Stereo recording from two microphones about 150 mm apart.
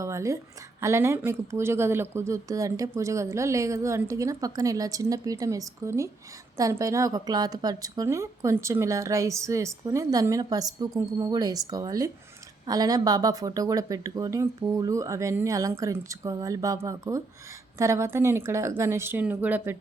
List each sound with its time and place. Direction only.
0.0 s a woman's voice: 20° right (ahead or behind)